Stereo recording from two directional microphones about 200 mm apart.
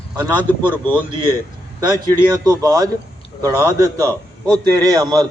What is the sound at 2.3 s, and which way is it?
A man's voice, 20° right (ahead or behind).